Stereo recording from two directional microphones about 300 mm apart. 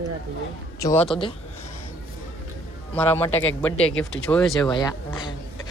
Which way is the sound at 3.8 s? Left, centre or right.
Centre.